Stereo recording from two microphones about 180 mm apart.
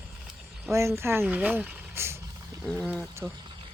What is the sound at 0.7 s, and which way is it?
Speech, 15° right (ahead or behind).